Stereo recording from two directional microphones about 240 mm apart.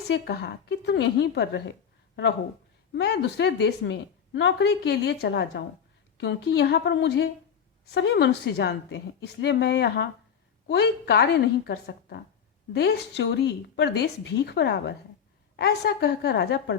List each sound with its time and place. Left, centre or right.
0.1 s a woman's voice: left
2.9 s a woman's voice: left